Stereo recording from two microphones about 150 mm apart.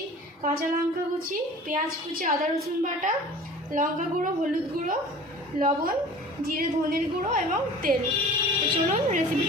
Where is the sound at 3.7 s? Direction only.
65° right (ahead or behind).